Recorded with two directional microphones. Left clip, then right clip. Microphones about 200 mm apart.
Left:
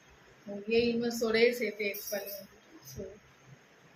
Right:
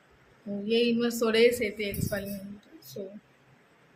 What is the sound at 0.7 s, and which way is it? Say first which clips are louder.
A woman's voice: right 3 dB; 60° right (ahead or behind).